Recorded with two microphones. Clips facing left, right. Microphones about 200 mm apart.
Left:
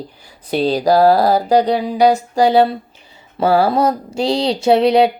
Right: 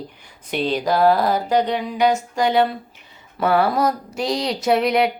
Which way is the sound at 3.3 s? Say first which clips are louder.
Left 4 dB; 30° left (ahead or behind).